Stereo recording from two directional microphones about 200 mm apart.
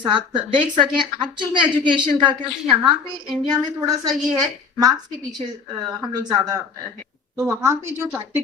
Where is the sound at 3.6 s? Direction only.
20° right (ahead or behind).